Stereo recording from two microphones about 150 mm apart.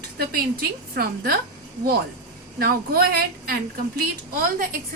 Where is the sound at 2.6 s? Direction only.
85° right.